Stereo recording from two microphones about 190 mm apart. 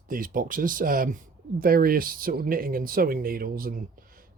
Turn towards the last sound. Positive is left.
turn(degrees=-50)  # may be behind; listen again after turning